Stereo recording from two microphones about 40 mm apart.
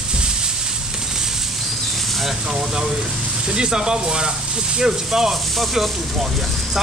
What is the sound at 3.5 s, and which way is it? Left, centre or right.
Speech, centre.